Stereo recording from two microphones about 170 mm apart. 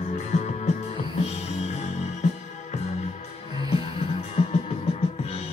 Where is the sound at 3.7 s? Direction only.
30° left (ahead or behind).